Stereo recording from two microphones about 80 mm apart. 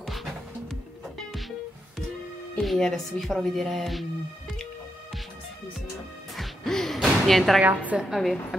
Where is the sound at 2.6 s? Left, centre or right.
Centre.